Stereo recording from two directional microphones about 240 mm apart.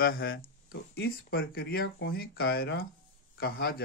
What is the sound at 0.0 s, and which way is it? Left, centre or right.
Speech, left.